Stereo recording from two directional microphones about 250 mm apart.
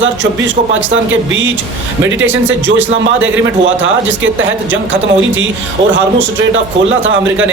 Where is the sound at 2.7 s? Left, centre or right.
Right.